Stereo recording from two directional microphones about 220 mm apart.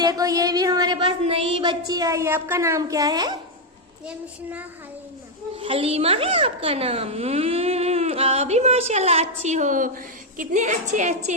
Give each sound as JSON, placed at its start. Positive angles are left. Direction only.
{"t": 0.0, "sound": "speech", "side_deg": -15}
{"t": 5.5, "sound": "a child's voice", "side_deg": -25}